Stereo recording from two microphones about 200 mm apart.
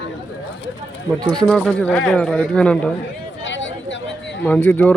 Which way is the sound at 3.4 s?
65° left (ahead or behind).